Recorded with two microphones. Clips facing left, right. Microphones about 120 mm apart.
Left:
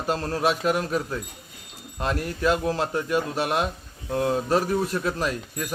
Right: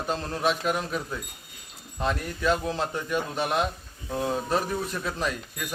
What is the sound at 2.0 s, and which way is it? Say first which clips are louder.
A man's voice: left 2 dB; 5° left (ahead or behind).